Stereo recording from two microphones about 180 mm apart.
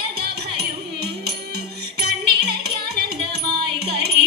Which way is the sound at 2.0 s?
60° right (ahead or behind).